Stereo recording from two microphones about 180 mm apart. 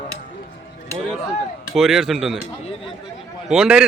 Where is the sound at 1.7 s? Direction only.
Centre (ahead or behind).